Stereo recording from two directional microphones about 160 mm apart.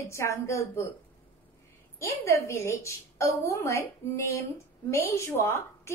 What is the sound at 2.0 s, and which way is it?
A woman's voice, 20° left (ahead or behind).